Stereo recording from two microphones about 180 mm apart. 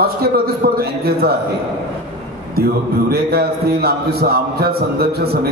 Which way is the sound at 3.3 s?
60° right (ahead or behind).